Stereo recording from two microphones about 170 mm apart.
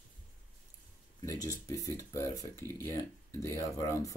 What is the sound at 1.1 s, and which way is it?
Speech, 20° left (ahead or behind).